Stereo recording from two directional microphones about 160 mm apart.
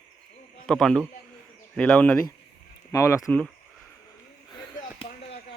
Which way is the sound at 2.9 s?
20° left (ahead or behind).